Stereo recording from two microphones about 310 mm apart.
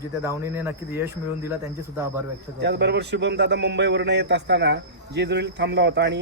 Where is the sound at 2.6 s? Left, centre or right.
Right.